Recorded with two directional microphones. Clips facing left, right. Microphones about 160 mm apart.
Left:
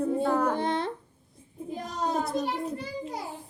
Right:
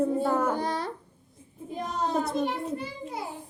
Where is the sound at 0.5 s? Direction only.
25° left (ahead or behind).